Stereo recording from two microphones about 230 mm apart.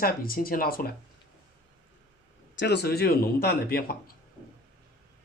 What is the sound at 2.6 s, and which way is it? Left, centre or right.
Speech, left.